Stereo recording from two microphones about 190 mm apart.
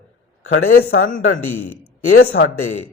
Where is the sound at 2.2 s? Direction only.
90° left.